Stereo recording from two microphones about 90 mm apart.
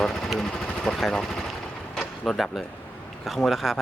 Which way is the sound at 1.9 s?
Centre (ahead or behind).